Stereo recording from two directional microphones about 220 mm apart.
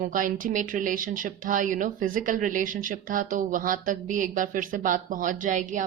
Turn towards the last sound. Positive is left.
turn(degrees=-35)  # may be behind; listen again after turning